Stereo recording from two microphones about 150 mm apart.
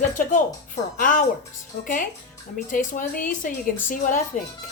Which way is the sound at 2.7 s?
60° left (ahead or behind).